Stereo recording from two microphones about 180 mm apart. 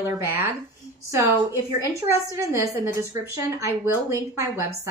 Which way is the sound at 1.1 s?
15° right (ahead or behind).